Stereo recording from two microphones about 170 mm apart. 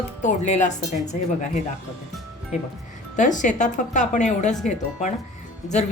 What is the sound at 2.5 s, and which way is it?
A woman's voice, 45° left (ahead or behind).